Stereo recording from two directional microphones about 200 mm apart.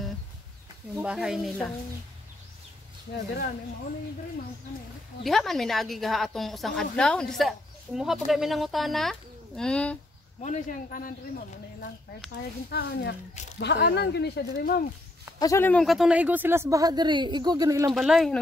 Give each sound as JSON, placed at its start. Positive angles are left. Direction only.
{"t": 0.9, "sound": "a woman's voice", "side_deg": -5}
{"t": 5.2, "sound": "a woman's voice", "side_deg": 0}
{"t": 10.4, "sound": "speech", "side_deg": 35}
{"t": 12.6, "sound": "speech", "side_deg": 55}
{"t": 15.3, "sound": "speech", "side_deg": 15}
{"t": 17.9, "sound": "a woman's voice", "side_deg": 0}